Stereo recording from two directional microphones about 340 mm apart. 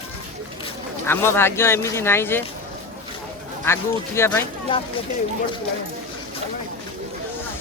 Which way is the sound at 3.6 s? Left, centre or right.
Centre.